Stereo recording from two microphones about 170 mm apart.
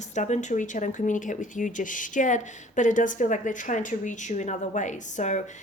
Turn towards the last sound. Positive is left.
turn(degrees=45)  # may be behind; listen again after turning